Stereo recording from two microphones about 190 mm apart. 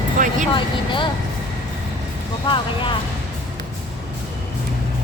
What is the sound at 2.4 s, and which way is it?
Speech, 25° left (ahead or behind).